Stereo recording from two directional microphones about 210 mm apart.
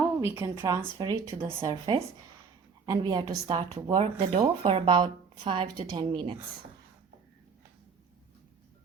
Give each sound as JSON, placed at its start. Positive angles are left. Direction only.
{"t": 0.2, "sound": "a woman's voice", "side_deg": -15}